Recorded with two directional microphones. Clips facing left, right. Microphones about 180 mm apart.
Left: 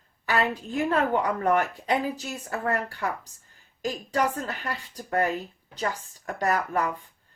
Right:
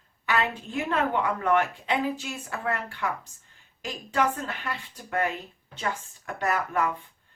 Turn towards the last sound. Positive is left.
turn(degrees=35)  # may be behind; listen again after turning